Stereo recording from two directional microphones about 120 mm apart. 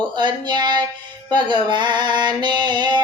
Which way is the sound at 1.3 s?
40° right (ahead or behind).